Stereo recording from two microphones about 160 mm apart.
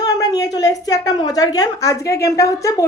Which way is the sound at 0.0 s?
25° left (ahead or behind).